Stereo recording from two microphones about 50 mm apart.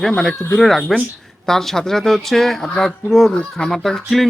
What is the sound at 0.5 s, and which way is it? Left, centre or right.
Speech, centre.